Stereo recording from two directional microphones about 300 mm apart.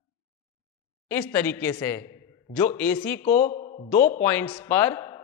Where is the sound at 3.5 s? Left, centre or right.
Left.